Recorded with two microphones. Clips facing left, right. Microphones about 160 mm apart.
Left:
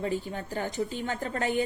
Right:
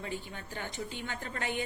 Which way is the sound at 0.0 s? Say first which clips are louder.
Left 9 dB; 40° left (ahead or behind).